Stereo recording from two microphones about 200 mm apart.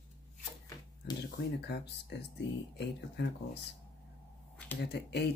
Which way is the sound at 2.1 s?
60° left (ahead or behind).